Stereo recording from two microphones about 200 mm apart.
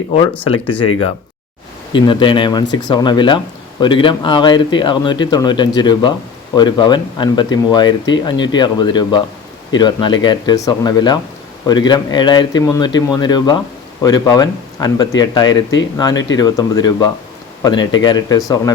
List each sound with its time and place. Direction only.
1.9 s speech: 25° left (ahead or behind)